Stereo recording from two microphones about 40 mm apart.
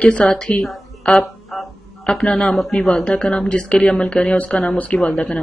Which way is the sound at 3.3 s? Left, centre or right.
Left.